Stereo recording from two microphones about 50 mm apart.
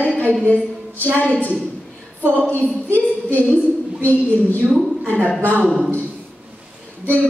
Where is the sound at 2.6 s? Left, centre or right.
Left.